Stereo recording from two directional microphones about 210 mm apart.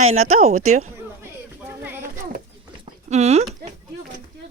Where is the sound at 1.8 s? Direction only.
10° right (ahead or behind).